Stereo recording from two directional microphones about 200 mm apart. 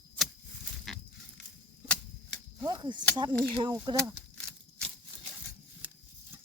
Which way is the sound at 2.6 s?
20° right (ahead or behind).